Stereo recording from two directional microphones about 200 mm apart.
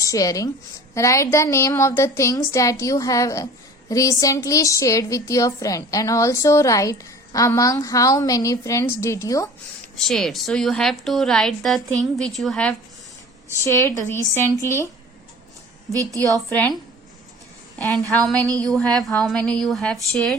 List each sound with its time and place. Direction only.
0.0 s a woman's voice: 15° left (ahead or behind)
9.9 s a woman's voice: centre (ahead or behind)
13.7 s a woman's voice: 15° left (ahead or behind)
15.9 s a woman's voice: 15° right (ahead or behind)
16.5 s a woman's voice: 10° left (ahead or behind)
17.7 s a woman's voice: 5° left (ahead or behind)